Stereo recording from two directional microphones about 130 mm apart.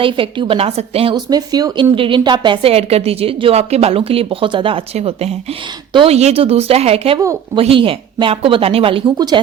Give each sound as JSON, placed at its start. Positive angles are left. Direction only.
{"t": 0.0, "sound": "a woman's voice", "side_deg": -40}
{"t": 1.1, "sound": "a woman's voice", "side_deg": -30}